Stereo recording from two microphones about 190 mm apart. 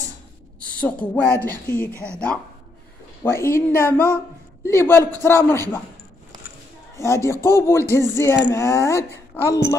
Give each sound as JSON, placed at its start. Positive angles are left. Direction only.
{"t": 0.7, "sound": "speech", "side_deg": 5}
{"t": 7.0, "sound": "speech", "side_deg": 15}